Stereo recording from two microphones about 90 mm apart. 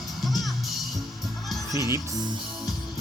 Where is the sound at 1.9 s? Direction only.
40° right (ahead or behind).